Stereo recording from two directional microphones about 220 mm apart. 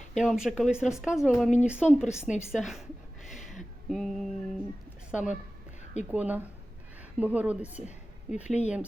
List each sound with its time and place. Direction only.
0.2 s speech: centre (ahead or behind)
3.8 s music: centre (ahead or behind)
5.1 s speech: 5° right (ahead or behind)
5.8 s a sound: 30° left (ahead or behind)
6.1 s a woman's voice: 5° right (ahead or behind)
8.4 s speech: 30° left (ahead or behind)